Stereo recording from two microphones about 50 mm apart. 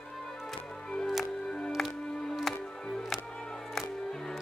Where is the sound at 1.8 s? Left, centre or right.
Centre.